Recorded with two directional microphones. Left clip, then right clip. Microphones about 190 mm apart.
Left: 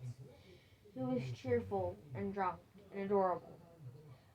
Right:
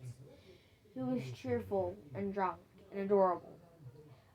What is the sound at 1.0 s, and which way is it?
A woman's voice, 20° right (ahead or behind).